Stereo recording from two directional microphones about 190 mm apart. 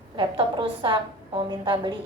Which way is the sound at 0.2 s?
25° right (ahead or behind).